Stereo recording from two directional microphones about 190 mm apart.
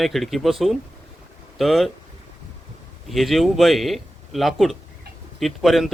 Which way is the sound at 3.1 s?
Centre (ahead or behind).